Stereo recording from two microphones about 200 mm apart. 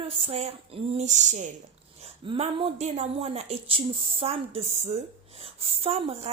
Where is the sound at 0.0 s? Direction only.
30° right (ahead or behind).